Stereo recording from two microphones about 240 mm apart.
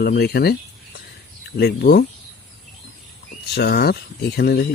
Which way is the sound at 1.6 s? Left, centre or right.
Left.